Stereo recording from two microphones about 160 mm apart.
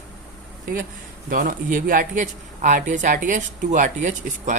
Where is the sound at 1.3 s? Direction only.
60° right (ahead or behind).